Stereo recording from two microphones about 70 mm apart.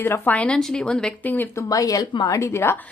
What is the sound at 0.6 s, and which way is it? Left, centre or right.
Speech, centre.